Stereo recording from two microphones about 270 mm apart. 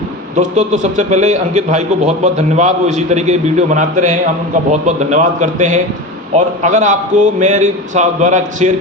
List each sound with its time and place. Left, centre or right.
0.3 s a man's voice: right